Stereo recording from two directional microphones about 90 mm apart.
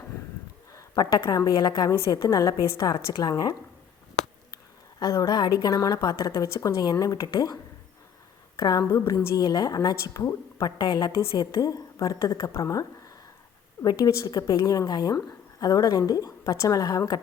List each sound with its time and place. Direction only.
0.8 s a sound: 45° left (ahead or behind)
1.5 s a woman's voice: 50° left (ahead or behind)
4.5 s a woman's voice: 40° left (ahead or behind)
13.8 s a woman's voice: 45° left (ahead or behind)